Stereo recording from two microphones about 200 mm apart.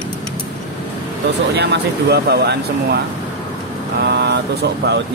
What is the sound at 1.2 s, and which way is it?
Speech, 55° right (ahead or behind).